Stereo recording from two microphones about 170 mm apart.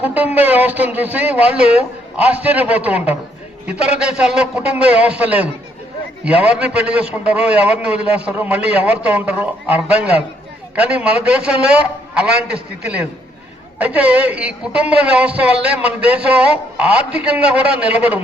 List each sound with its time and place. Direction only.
0.0 s a man's voice: 10° right (ahead or behind)